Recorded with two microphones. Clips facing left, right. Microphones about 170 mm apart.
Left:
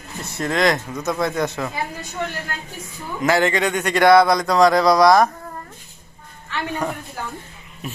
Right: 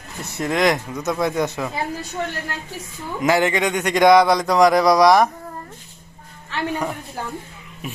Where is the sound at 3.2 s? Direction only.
15° right (ahead or behind).